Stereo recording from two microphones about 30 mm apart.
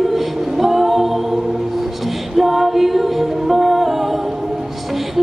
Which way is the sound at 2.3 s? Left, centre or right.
Centre.